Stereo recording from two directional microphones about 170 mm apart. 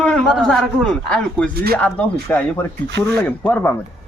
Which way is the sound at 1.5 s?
65° right (ahead or behind).